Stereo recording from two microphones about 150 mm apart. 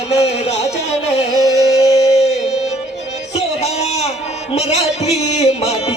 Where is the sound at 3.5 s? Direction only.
45° left (ahead or behind).